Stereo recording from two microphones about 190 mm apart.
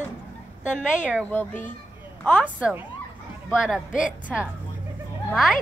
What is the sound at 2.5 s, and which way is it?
A woman's voice, 5° right (ahead or behind).